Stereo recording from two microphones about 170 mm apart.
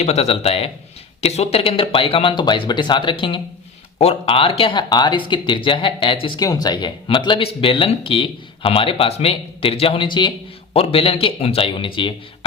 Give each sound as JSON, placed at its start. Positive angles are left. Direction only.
{"t": 0.0, "sound": "speech", "side_deg": 40}